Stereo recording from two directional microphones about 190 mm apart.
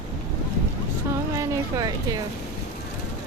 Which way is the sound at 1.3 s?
15° right (ahead or behind).